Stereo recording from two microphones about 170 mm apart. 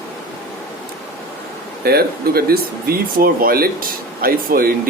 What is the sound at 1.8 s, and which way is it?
Speech, 65° right (ahead or behind).